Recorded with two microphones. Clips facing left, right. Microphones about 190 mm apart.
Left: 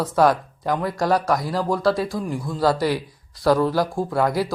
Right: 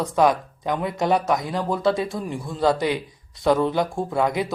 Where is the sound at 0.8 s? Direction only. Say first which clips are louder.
Even; 20° right (ahead or behind).